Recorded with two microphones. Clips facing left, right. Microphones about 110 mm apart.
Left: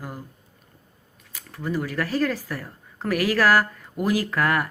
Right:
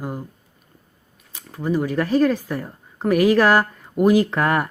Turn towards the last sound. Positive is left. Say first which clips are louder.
# right 5 dB
turn(degrees=-25)  # may be behind; listen again after turning